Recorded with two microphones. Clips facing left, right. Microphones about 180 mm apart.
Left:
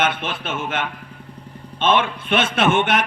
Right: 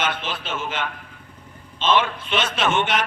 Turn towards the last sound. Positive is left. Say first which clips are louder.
# left 4 dB
turn(degrees=55)  # may be behind; listen again after turning